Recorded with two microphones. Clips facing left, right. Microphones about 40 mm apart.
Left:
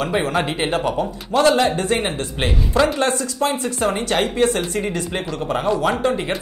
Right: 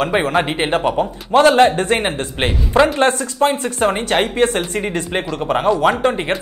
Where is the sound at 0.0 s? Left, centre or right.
Right.